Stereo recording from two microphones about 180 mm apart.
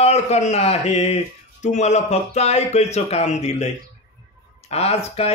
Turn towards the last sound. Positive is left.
turn(degrees=35)  # may be behind; listen again after turning